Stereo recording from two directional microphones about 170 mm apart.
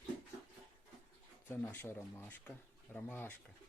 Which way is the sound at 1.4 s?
15° left (ahead or behind).